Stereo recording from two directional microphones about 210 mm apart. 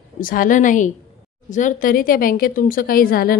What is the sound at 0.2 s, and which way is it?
A woman's voice, 40° left (ahead or behind).